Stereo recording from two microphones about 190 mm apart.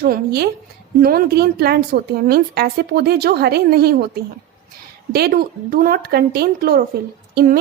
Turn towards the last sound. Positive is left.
turn(degrees=-55)  # may be behind; listen again after turning